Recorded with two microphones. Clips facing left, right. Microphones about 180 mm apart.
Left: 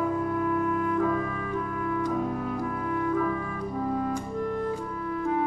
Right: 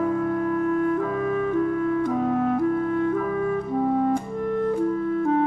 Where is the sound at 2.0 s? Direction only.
65° right (ahead or behind).